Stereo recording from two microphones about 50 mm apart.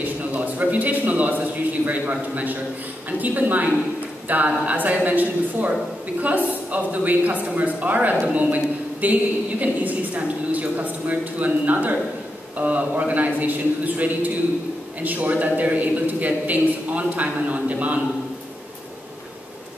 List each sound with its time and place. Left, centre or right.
0.0 s a man's voice: right